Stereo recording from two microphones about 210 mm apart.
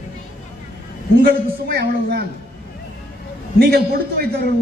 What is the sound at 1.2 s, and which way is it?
A woman's voice, 45° right (ahead or behind).